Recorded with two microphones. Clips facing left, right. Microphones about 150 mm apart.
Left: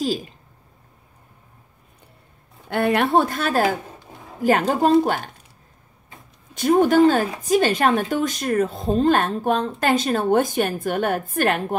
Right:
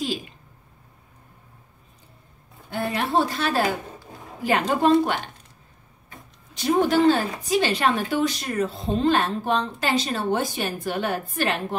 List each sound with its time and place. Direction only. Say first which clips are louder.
0.0 s a woman's voice: left 4 dB; 40° left (ahead or behind)
2.7 s a woman's voice: left 6 dB; 65° left (ahead or behind); by 5.3 s 40° left (ahead or behind)
6.5 s speech: left 4 dB; 50° left (ahead or behind)